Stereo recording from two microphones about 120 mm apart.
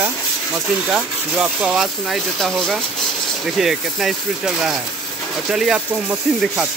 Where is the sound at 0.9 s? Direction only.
10° right (ahead or behind).